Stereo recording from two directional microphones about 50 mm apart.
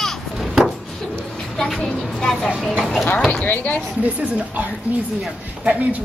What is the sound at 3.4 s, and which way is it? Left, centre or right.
Speech, left.